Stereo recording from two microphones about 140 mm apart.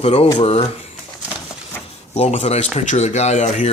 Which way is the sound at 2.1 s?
50° left (ahead or behind).